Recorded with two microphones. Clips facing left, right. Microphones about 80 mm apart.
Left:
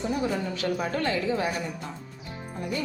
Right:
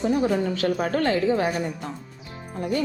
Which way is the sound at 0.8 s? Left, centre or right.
Right.